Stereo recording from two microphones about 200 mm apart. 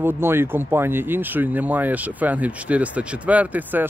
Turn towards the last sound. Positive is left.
turn(degrees=-10)  # may be behind; listen again after turning